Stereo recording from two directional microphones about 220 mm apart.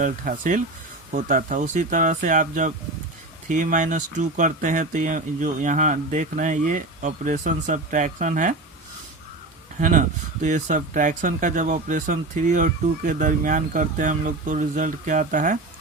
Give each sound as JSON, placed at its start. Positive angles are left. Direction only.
{"t": 0.0, "sound": "speech", "side_deg": -35}
{"t": 9.8, "sound": "speech", "side_deg": -35}